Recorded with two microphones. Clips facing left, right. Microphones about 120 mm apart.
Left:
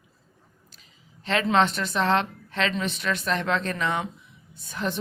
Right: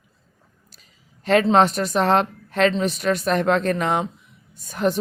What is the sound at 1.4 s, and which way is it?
A woman's voice, 40° right (ahead or behind).